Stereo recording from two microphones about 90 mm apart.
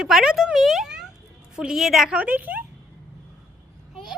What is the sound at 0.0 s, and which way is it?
Speech, 5° right (ahead or behind).